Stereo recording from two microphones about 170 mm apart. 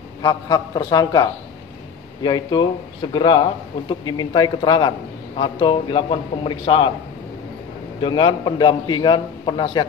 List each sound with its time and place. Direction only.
0.2 s a man's voice: 25° left (ahead or behind)
8.0 s a man's voice: 25° left (ahead or behind)